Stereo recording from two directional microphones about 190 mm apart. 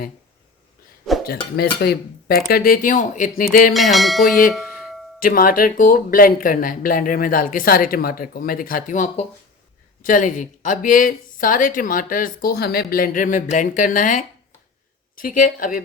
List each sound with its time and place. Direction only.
1.8 s speech: 55° left (ahead or behind)
3.7 s a sound: centre (ahead or behind)
5.2 s speech: 45° left (ahead or behind)